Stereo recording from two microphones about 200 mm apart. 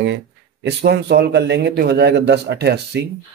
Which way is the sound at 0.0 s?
60° right (ahead or behind).